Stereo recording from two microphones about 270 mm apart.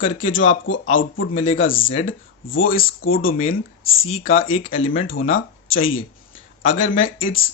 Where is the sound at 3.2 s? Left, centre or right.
Left.